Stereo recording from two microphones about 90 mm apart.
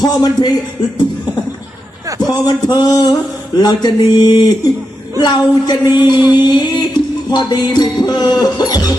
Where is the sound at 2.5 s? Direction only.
50° left (ahead or behind).